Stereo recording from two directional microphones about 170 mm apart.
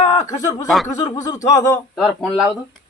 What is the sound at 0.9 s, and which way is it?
Speech, 20° left (ahead or behind).